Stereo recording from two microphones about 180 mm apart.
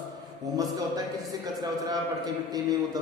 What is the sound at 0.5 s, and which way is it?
Speech, 20° right (ahead or behind).